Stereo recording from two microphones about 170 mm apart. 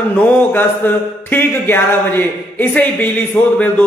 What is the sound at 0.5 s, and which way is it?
Speech, 10° left (ahead or behind).